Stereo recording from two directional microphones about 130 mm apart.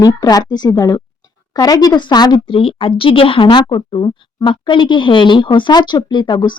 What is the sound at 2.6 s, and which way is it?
Speech, 45° left (ahead or behind).